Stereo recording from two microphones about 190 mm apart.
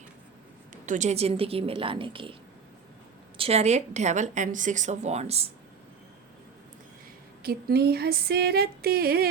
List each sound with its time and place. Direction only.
0.9 s a woman's voice: 40° right (ahead or behind)
3.3 s a woman's voice: 30° right (ahead or behind)
7.4 s female singing: 55° right (ahead or behind)